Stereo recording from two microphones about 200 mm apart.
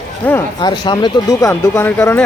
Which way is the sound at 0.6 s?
20° left (ahead or behind).